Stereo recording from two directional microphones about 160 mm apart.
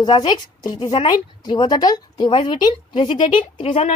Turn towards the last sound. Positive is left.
turn(degrees=35)  # may be behind; listen again after turning